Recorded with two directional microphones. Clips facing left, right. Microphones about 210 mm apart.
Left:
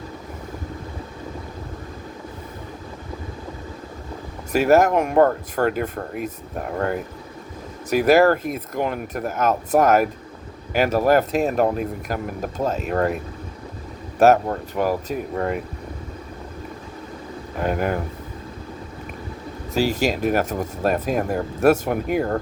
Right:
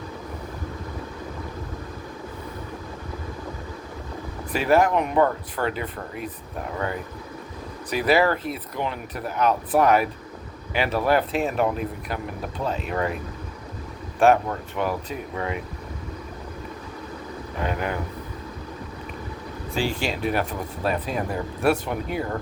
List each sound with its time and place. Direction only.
4.5 s speech: 45° left (ahead or behind)
7.9 s speech: 45° left (ahead or behind)
14.2 s speech: 40° left (ahead or behind)
17.6 s speech: 45° left (ahead or behind)
19.7 s speech: 40° left (ahead or behind)